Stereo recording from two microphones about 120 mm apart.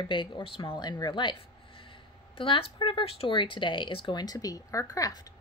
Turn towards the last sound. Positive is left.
turn(degrees=30)  # may be behind; listen again after turning